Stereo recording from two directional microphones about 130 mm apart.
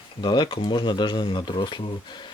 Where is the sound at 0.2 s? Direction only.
35° left (ahead or behind).